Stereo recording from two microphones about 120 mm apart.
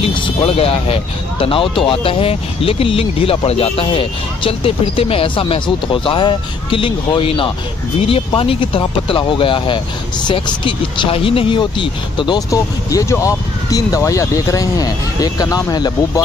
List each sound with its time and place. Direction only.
0.0 s speech: 55° left (ahead or behind); by 15.9 s 30° left (ahead or behind)